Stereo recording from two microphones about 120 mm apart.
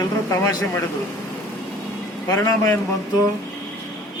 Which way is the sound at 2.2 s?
25° left (ahead or behind).